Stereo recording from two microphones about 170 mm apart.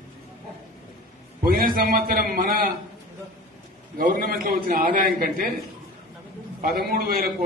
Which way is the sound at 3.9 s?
55° right (ahead or behind).